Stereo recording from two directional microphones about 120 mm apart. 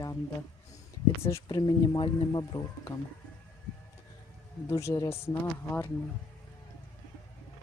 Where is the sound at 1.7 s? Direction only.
40° left (ahead or behind).